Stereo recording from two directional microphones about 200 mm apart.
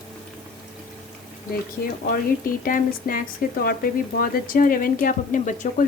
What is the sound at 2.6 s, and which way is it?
Speech, 45° left (ahead or behind).